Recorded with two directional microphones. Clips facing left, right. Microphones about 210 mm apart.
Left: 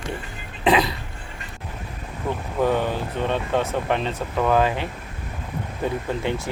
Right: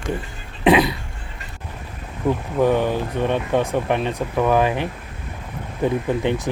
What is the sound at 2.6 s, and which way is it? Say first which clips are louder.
Speech: right 3 dB; 15° right (ahead or behind).